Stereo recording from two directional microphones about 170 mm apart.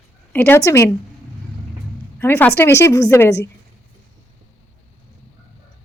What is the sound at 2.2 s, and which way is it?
Speech, 10° left (ahead or behind).